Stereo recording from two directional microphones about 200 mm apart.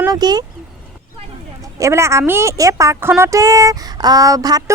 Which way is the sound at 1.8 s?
15° right (ahead or behind).